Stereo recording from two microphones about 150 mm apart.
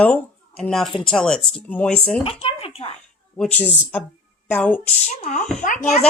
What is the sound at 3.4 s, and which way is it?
A woman's voice, 10° left (ahead or behind).